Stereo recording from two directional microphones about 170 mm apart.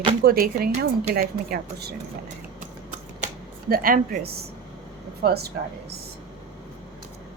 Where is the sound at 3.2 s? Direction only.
60° right (ahead or behind).